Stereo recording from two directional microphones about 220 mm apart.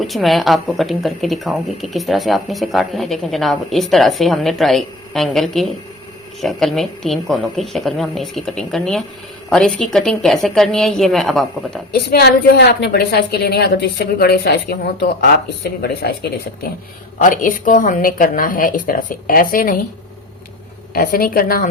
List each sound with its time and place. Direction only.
0.0 s speech: centre (ahead or behind)
11.9 s a woman's voice: 45° left (ahead or behind)
20.9 s a woman's voice: 40° left (ahead or behind)